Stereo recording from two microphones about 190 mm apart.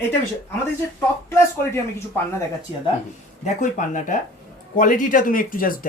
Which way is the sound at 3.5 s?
40° left (ahead or behind).